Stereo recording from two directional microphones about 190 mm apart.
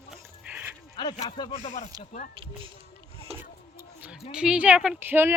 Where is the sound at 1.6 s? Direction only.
40° left (ahead or behind).